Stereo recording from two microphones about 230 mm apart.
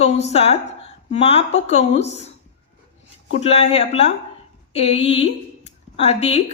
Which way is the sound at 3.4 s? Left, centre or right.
Left.